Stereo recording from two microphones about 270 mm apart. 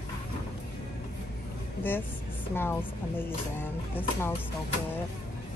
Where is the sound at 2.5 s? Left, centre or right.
Centre.